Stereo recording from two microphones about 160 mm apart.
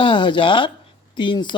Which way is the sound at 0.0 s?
30° left (ahead or behind).